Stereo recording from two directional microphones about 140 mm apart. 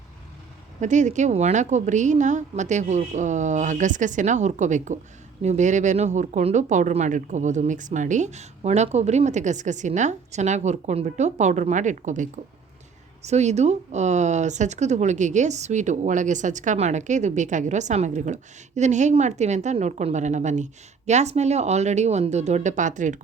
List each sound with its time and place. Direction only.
0.8 s speech: 60° right (ahead or behind)